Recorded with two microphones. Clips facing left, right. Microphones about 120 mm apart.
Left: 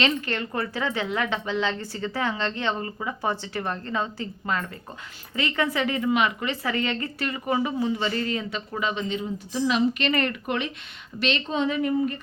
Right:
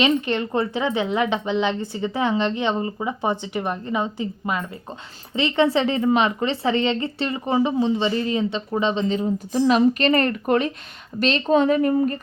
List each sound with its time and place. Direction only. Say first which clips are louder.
0.0 s a woman's voice: right 6 dB; 20° right (ahead or behind); by 12.1 s 45° right (ahead or behind)